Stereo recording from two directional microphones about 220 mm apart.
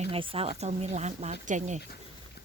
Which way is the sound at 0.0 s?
25° right (ahead or behind).